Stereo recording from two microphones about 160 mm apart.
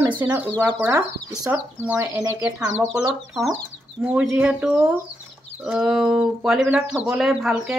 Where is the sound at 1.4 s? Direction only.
10° right (ahead or behind).